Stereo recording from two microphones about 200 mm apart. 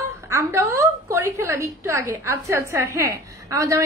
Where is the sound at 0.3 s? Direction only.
15° right (ahead or behind).